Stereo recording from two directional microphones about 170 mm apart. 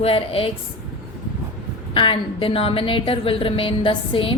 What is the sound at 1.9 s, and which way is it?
A woman's voice, 30° left (ahead or behind).